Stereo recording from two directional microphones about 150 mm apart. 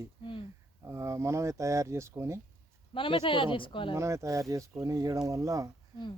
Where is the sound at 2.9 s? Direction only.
35° left (ahead or behind).